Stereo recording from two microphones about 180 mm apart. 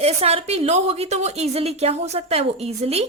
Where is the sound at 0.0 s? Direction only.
35° right (ahead or behind).